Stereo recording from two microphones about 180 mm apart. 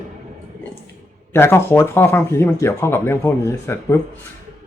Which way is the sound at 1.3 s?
15° left (ahead or behind).